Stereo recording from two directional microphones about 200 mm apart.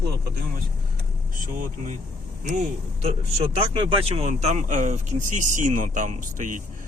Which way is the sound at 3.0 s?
30° right (ahead or behind).